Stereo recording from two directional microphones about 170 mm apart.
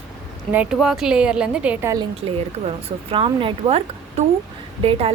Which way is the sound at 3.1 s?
30° right (ahead or behind).